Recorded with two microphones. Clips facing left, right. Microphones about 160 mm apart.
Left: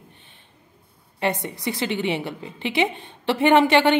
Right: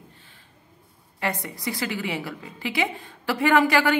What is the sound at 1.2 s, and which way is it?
A woman's voice, 25° left (ahead or behind).